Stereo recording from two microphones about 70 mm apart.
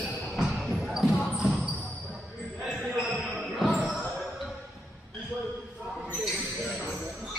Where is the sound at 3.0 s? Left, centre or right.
Centre.